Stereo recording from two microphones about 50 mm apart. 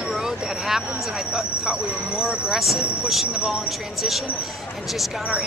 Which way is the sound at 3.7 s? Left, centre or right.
Centre.